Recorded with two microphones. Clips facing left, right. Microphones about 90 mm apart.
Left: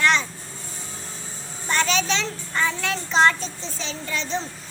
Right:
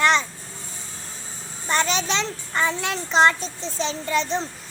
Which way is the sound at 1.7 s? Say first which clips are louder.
Even; 20° right (ahead or behind).